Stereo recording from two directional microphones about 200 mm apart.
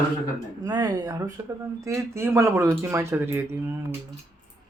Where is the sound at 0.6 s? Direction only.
20° right (ahead or behind).